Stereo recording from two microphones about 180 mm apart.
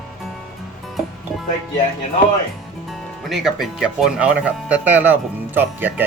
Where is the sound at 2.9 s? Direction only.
Centre (ahead or behind).